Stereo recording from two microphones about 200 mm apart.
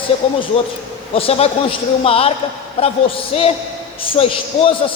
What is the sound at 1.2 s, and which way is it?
A man's voice, 30° left (ahead or behind).